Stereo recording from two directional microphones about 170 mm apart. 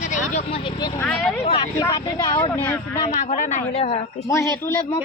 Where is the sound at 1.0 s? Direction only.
5° left (ahead or behind).